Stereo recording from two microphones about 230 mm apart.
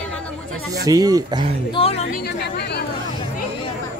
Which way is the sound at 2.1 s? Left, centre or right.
Left.